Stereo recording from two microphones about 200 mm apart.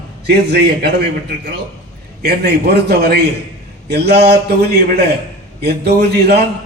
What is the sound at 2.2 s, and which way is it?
A man's voice, 50° right (ahead or behind).